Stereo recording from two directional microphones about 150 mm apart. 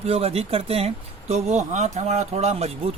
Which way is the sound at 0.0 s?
40° right (ahead or behind).